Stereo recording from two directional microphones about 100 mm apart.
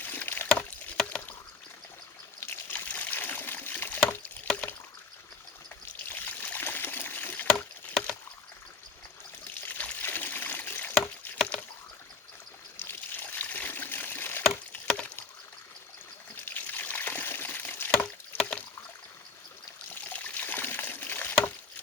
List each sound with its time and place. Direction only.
0.0 s rowboat: 20° left (ahead or behind)
2.5 s water: 15° left (ahead or behind)
6.1 s trickle: 20° left (ahead or behind)
9.6 s trickle: 15° left (ahead or behind)
12.8 s trickle: 20° left (ahead or behind)
14.9 s rowboat: 10° left (ahead or behind)
16.5 s water: 20° left (ahead or behind)
17.9 s a sound: 10° left (ahead or behind)
19.9 s trickle: 15° left (ahead or behind)